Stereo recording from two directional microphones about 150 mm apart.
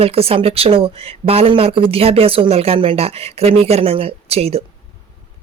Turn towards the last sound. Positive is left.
turn(degrees=-40)  # may be behind; listen again after turning